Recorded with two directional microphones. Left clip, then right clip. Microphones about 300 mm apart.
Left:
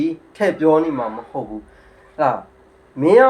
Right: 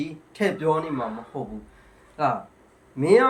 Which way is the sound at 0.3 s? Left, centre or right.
Centre.